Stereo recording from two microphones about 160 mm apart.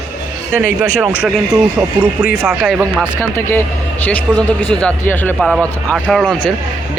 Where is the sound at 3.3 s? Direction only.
15° left (ahead or behind).